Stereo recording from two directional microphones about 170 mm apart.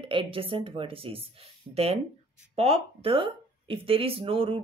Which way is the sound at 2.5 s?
35° right (ahead or behind).